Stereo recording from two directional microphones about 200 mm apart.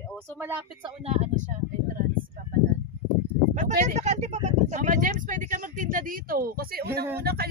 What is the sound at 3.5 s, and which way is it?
Speech, 35° right (ahead or behind).